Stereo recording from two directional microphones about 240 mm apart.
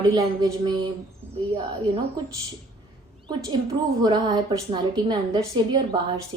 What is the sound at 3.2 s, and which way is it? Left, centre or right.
A woman's voice, centre.